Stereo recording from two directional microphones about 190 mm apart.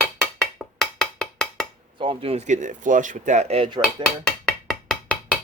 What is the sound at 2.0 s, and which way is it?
Speech, 30° right (ahead or behind).